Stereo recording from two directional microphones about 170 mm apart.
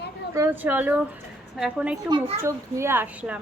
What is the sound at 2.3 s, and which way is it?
A child's voice, 15° right (ahead or behind).